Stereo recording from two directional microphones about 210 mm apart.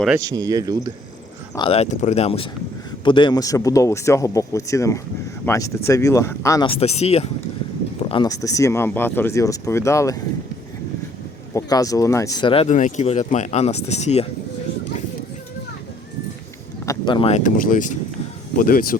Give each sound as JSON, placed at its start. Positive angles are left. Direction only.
{"t": 0.3, "sound": "speech", "side_deg": -15}
{"t": 1.5, "sound": "speech", "side_deg": 25}
{"t": 6.7, "sound": "speech", "side_deg": 30}
{"t": 8.1, "sound": "speech", "side_deg": 20}
{"t": 11.5, "sound": "speech", "side_deg": 15}
{"t": 16.8, "sound": "speech", "side_deg": 20}